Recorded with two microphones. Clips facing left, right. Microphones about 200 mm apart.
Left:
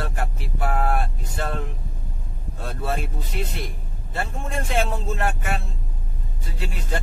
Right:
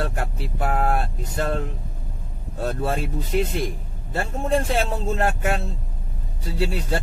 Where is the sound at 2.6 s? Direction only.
45° right (ahead or behind).